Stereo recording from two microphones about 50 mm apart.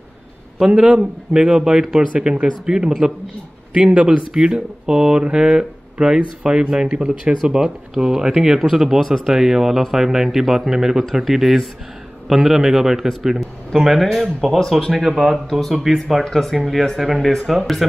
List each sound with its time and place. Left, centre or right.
0.7 s speech: centre
15.3 s speech: centre